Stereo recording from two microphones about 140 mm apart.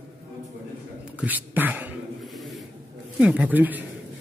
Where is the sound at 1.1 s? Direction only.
10° right (ahead or behind).